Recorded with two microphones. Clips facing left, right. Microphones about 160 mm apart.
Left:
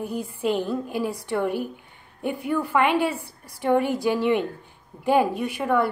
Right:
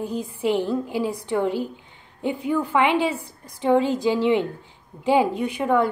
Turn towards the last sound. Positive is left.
turn(degrees=-15)  # may be behind; listen again after turning